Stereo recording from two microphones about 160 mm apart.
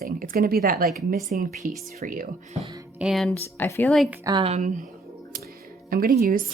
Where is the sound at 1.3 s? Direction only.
55° right (ahead or behind).